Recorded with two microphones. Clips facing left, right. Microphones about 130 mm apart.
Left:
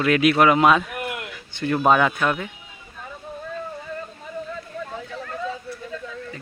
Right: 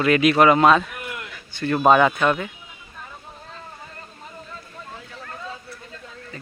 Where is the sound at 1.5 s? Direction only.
20° left (ahead or behind).